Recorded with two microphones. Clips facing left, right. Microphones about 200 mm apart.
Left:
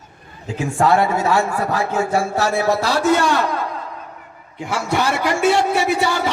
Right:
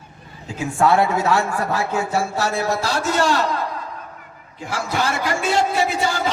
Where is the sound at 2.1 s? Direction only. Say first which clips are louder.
Left 4 dB; 60° left (ahead or behind).